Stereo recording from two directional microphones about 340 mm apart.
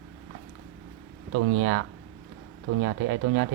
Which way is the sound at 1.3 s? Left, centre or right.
Right.